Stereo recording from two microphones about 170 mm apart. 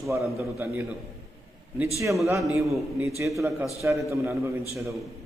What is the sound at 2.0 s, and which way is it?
A man's voice, 15° right (ahead or behind).